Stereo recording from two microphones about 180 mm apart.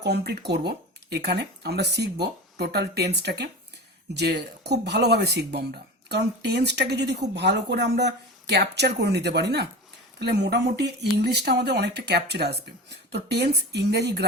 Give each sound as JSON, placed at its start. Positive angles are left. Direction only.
{"t": 0.0, "sound": "speech", "side_deg": -65}